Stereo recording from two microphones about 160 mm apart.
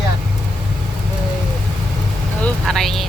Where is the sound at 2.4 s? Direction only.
5° left (ahead or behind).